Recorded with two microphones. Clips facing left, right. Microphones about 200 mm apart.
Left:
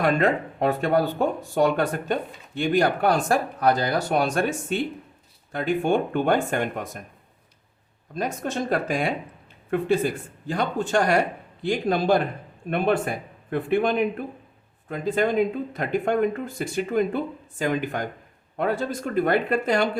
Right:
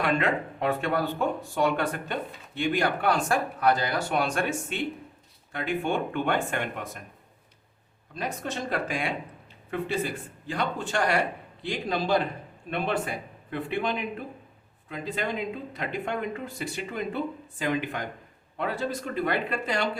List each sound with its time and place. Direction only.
0.0 s speech: 40° left (ahead or behind)
8.1 s speech: 45° left (ahead or behind)